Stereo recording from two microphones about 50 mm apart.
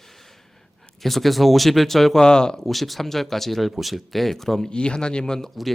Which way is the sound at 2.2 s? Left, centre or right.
Centre.